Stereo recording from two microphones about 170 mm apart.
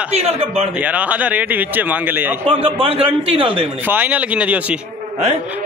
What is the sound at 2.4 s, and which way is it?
A man's voice, 30° right (ahead or behind).